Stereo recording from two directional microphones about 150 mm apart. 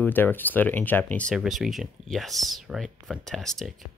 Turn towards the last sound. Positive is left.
turn(degrees=0)  # may be behind; listen again after turning